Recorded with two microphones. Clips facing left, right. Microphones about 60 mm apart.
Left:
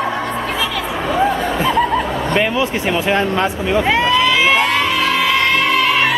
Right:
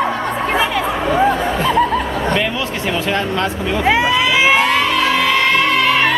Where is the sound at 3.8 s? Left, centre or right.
Centre.